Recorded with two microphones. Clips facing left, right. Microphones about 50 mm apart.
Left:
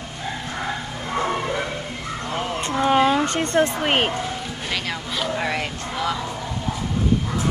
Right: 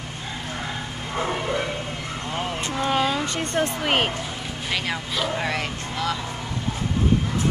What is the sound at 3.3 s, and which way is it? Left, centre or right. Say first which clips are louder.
Speech: left 4 dB; left.